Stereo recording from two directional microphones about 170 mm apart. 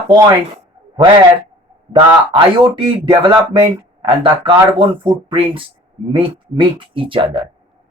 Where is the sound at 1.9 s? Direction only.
30° right (ahead or behind).